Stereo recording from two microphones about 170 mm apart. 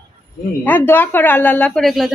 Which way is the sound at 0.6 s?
10° left (ahead or behind).